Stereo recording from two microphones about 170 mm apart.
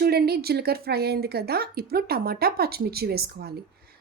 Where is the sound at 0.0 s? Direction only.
65° right (ahead or behind).